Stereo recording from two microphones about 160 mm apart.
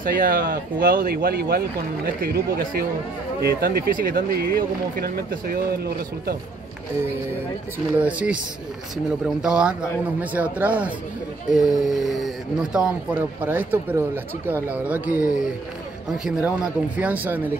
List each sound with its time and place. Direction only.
0.0 s speech: 60° right (ahead or behind)
8.0 s a man's voice: 10° right (ahead or behind)